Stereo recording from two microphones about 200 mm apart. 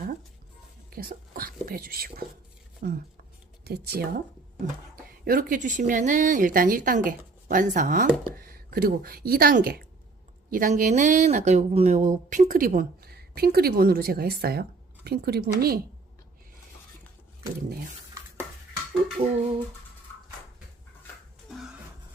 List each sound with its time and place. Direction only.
0.9 s a woman's voice: 50° right (ahead or behind)
19.2 s a woman's voice: 40° right (ahead or behind)